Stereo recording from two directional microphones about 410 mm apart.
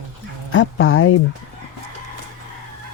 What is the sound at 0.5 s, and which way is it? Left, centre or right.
Speech, left.